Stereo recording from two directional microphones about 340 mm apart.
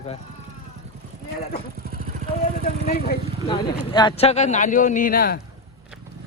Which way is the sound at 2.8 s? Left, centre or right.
Left.